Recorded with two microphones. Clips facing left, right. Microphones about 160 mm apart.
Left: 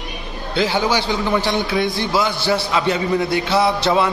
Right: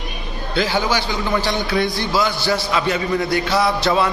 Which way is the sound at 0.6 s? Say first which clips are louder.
Left 1 dB; 20° left (ahead or behind).